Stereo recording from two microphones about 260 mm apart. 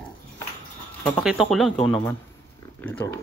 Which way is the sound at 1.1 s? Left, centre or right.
Centre.